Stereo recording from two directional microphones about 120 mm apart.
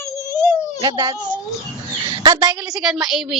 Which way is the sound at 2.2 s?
35° right (ahead or behind).